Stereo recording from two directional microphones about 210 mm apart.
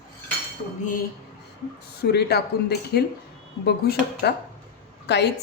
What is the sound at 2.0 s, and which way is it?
A woman's voice, 50° left (ahead or behind).